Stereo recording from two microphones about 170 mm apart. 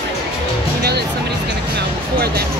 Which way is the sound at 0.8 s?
70° right (ahead or behind).